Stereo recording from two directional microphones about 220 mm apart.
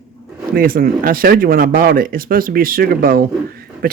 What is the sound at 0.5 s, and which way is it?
Speech, 40° right (ahead or behind).